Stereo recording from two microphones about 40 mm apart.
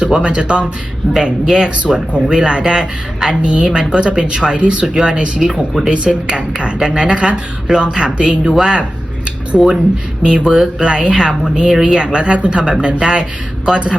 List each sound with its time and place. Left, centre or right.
0.0 s a woman's voice: right
6.7 s speech: centre
7.0 s a woman's voice: right
8.5 s speech: centre
9.5 s speech: centre
10.2 s a woman's voice: right